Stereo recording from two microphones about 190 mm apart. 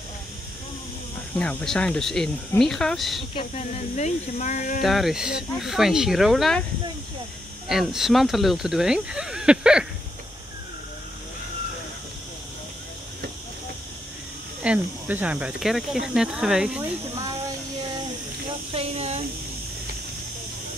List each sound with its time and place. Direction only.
1.4 s speech: 5° left (ahead or behind)
3.3 s speech: 35° left (ahead or behind)
4.8 s speech: centre (ahead or behind)
7.6 s speech: centre (ahead or behind)
14.6 s speech: 5° right (ahead or behind)
18.7 s a sound: 30° right (ahead or behind)